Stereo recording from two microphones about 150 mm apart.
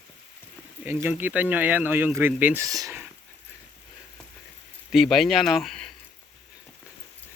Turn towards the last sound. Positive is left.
turn(degrees=0)  # may be behind; listen again after turning